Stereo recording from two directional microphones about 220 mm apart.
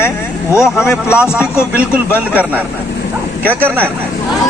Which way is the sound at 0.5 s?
5° right (ahead or behind).